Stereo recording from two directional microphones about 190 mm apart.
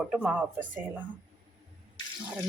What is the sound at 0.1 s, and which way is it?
Speech, 5° right (ahead or behind).